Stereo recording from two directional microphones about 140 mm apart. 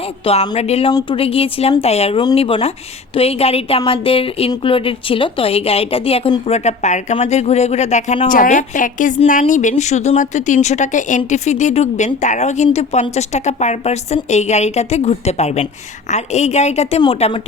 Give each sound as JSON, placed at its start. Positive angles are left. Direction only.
{"t": 0.5, "sound": "a woman's voice", "side_deg": 50}
{"t": 0.9, "sound": "a woman's voice", "side_deg": 35}